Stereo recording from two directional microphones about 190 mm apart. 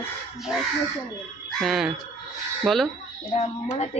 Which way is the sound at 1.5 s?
Centre (ahead or behind).